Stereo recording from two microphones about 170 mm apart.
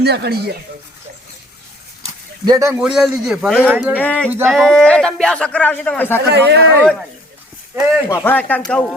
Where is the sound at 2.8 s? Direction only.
5° right (ahead or behind).